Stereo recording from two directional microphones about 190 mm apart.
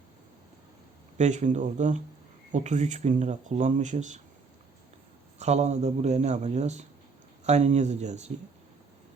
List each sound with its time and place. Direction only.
1.2 s speech: 40° right (ahead or behind)
5.4 s speech: 35° right (ahead or behind)